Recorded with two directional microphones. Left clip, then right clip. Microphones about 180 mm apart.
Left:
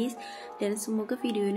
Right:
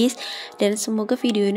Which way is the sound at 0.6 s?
45° right (ahead or behind).